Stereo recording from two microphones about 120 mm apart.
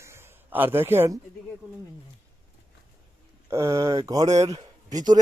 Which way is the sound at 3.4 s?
25° right (ahead or behind).